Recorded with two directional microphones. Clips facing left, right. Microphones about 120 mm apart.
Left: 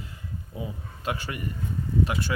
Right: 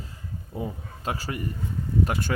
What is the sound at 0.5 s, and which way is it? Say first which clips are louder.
A man's voice: right 4 dB; 40° right (ahead or behind).